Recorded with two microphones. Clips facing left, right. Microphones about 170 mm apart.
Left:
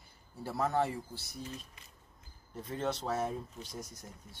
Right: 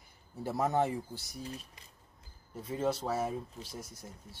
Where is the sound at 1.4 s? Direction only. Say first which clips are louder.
Right 2 dB; 35° right (ahead or behind).